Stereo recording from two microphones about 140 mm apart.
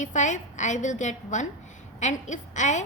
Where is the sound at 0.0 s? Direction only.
60° left (ahead or behind).